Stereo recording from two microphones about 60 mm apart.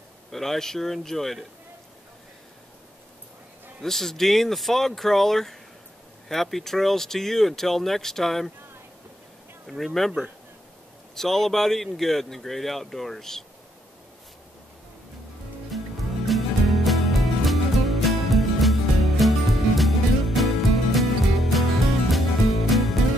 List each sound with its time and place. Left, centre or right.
0.3 s speech: centre
3.8 s speech: centre
9.7 s speech: centre
15.7 s music: centre